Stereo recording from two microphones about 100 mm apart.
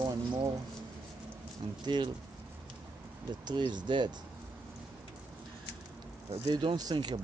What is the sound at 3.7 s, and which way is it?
Speech, 50° right (ahead or behind).